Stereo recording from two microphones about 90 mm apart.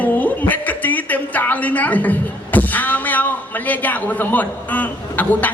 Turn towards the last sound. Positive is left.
turn(degrees=20)  # may be behind; listen again after turning